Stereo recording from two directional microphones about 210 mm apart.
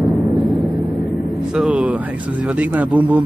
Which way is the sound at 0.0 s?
Centre (ahead or behind).